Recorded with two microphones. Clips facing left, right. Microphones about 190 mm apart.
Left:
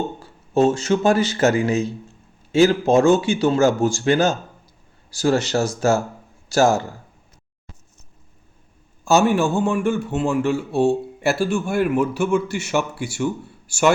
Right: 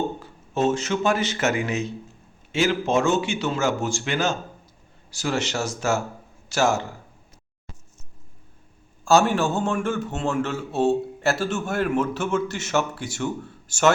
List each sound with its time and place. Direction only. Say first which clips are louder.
0.2 s speech: left 6 dB; 35° left (ahead or behind)
9.0 s a man's voice: left 2 dB; 15° left (ahead or behind)